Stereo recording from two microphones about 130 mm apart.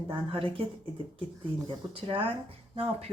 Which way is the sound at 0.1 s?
40° right (ahead or behind).